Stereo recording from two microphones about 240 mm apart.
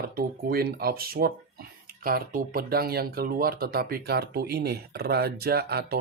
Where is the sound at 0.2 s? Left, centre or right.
Right.